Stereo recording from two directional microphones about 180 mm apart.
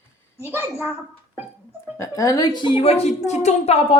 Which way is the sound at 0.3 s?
10° right (ahead or behind).